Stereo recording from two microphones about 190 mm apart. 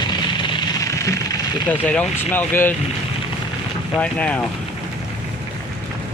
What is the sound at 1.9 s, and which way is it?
Speech, 10° left (ahead or behind).